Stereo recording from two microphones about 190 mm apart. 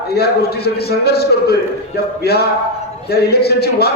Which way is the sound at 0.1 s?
55° left (ahead or behind).